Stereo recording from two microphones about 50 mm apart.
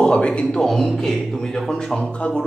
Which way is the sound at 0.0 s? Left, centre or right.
Centre.